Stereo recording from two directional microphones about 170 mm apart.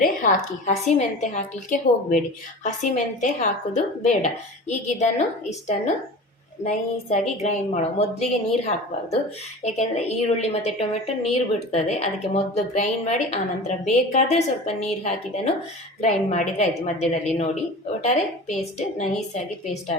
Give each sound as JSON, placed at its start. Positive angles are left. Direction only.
{"t": 0.0, "sound": "a woman's voice", "side_deg": 50}
{"t": 16.0, "sound": "a woman's voice", "side_deg": 45}